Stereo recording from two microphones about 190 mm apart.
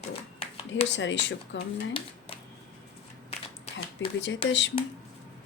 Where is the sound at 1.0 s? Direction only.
70° left (ahead or behind).